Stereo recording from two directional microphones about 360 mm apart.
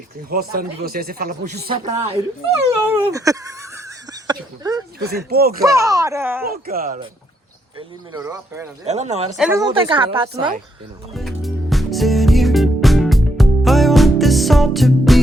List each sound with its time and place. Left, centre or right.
0.3 s speech: right
2.8 s a sound: centre
5.1 s speech: right
5.5 s a woman's voice: centre
6.5 s speech: right
7.8 s a woman's voice: centre
8.9 s speech: centre
9.3 s a woman's voice: centre
11.1 s music: centre